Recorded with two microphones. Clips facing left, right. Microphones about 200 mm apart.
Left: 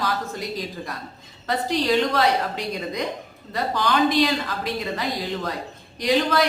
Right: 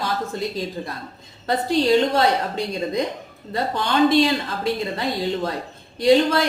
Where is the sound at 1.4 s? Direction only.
30° right (ahead or behind).